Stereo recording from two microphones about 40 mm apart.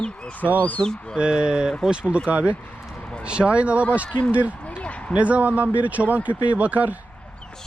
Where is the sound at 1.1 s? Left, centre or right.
Right.